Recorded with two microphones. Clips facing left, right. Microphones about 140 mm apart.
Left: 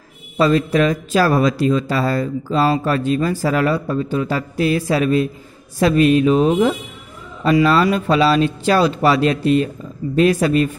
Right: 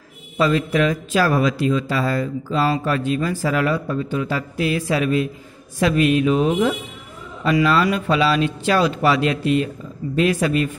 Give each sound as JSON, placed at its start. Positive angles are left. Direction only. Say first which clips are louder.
{"t": 0.4, "sound": "speech", "louder": "left 3 dB", "side_deg": 40}